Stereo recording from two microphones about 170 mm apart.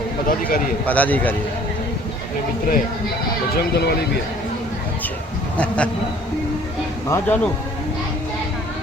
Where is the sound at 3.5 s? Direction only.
70° left (ahead or behind).